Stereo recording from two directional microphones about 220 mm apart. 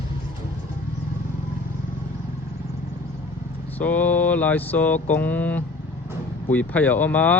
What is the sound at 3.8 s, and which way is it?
Mantra, 5° left (ahead or behind).